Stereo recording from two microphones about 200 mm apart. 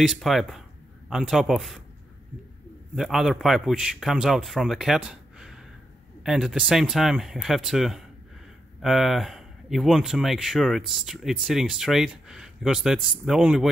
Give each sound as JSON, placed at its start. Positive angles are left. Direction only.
{"t": 0.0, "sound": "speech", "side_deg": 0}
{"t": 3.0, "sound": "speech", "side_deg": 0}